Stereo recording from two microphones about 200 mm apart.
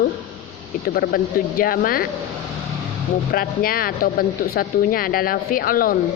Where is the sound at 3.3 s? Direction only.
45° left (ahead or behind).